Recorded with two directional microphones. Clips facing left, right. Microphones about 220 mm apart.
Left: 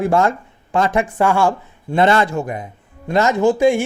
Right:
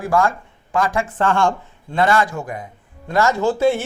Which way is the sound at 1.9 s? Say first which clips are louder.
Left 3 dB; 25° left (ahead or behind).